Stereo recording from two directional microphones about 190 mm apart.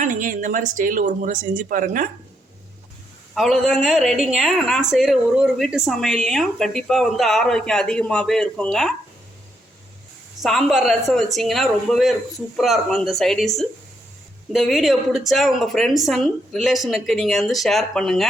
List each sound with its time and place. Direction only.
0.0 s speech: 45° right (ahead or behind)
3.3 s a woman's voice: centre (ahead or behind)
10.4 s a woman's voice: centre (ahead or behind)